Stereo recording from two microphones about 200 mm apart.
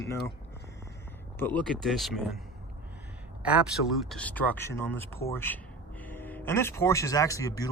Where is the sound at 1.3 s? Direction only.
10° left (ahead or behind).